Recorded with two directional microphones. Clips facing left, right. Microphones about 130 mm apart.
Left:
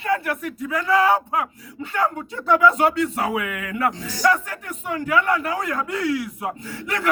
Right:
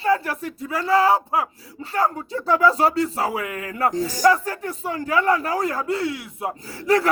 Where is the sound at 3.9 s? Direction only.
40° right (ahead or behind).